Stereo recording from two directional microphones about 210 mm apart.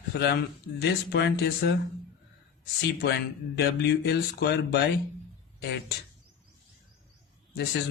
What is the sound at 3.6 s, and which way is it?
Speech, 50° left (ahead or behind).